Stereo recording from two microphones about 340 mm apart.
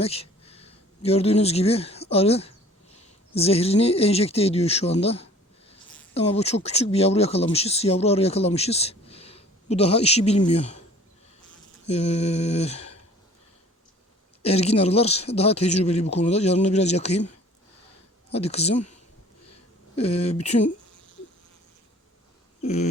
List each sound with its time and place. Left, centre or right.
0.0 s speech: centre
11.9 s speech: centre
14.4 s speech: centre
18.3 s speech: centre
20.0 s speech: centre
22.6 s speech: centre